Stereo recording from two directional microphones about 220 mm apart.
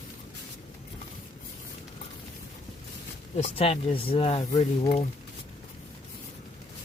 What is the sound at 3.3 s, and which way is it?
Speech, 30° left (ahead or behind).